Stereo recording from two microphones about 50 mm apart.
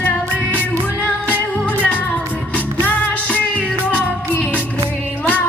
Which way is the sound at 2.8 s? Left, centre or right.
Left.